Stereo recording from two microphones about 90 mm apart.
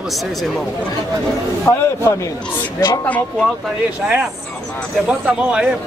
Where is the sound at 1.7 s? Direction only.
40° left (ahead or behind).